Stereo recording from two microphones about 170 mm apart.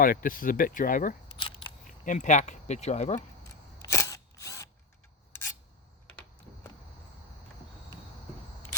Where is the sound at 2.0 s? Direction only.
45° left (ahead or behind).